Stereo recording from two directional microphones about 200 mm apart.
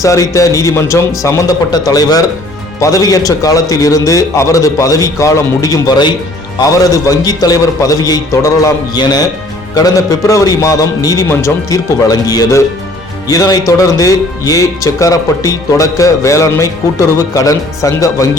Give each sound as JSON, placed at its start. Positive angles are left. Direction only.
{"t": 0.0, "sound": "speech", "side_deg": 15}